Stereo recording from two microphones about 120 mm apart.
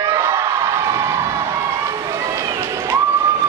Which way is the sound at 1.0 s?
25° right (ahead or behind).